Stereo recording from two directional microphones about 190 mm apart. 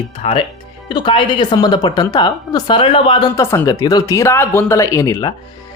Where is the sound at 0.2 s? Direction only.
30° left (ahead or behind).